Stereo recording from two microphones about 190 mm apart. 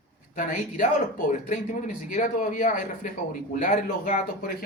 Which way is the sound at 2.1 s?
45° left (ahead or behind).